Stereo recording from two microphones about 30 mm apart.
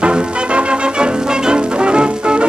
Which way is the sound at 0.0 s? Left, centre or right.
Right.